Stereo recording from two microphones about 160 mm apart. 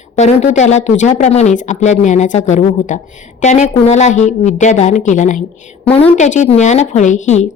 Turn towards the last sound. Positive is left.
turn(degrees=45)  # may be behind; listen again after turning